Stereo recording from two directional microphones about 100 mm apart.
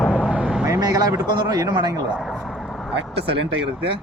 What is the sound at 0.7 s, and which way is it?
Speech, 40° right (ahead or behind).